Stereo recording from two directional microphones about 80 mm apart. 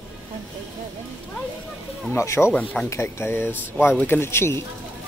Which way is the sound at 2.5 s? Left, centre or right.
Centre.